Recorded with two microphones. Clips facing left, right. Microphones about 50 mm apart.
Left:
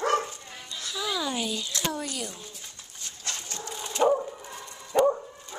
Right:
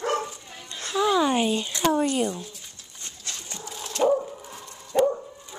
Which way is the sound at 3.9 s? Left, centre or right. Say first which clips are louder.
Right 1 dB; centre.